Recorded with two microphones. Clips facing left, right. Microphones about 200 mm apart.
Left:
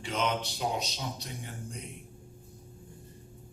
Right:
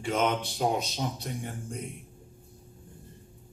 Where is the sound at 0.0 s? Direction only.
50° right (ahead or behind).